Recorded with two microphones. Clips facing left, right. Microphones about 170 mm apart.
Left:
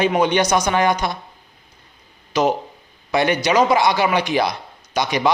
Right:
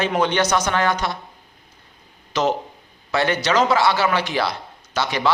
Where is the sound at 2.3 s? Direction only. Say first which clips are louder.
Left 2 dB; 10° left (ahead or behind).